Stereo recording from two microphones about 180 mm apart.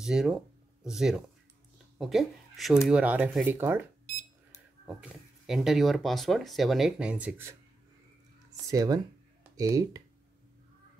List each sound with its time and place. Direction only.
0.0 s speech: 5° right (ahead or behind)
4.8 s speech: 5° right (ahead or behind)
8.6 s speech: 20° right (ahead or behind)